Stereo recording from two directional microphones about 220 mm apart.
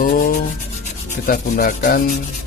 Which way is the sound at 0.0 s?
40° left (ahead or behind).